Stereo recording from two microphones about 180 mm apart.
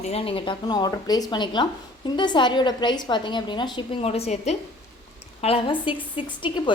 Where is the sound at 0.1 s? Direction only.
30° left (ahead or behind).